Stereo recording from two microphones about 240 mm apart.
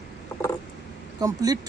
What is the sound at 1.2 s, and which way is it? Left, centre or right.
Speech, centre.